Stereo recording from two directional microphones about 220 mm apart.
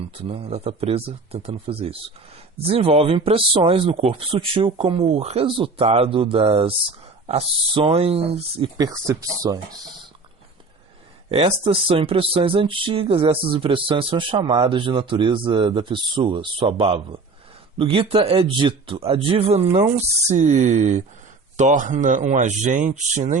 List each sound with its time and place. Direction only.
0.2 s speech: 25° right (ahead or behind)
11.3 s speech: 30° right (ahead or behind)